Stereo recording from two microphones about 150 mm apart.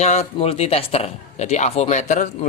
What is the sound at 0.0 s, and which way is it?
A man's voice, 50° left (ahead or behind).